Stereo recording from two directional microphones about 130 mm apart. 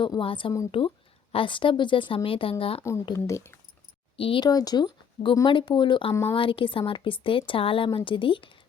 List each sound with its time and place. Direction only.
0.0 s speech: 40° left (ahead or behind)
3.2 s speech: 20° left (ahead or behind)
4.2 s speech: 45° left (ahead or behind)
4.4 s speech: 30° left (ahead or behind)